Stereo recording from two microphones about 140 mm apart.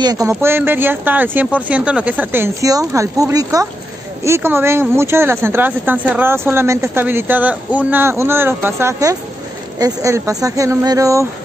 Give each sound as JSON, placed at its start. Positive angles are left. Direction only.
{"t": 0.0, "sound": "speech", "side_deg": -25}